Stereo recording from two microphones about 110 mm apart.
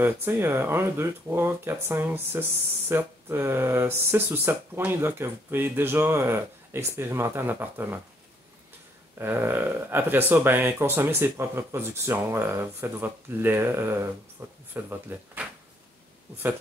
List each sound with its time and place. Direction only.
0.0 s speech: 20° right (ahead or behind)
9.2 s speech: 20° right (ahead or behind)